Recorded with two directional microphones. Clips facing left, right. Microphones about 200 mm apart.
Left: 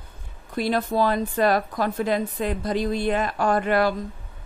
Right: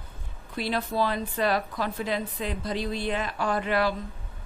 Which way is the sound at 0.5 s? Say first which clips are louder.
Left 5 dB; 45° left (ahead or behind).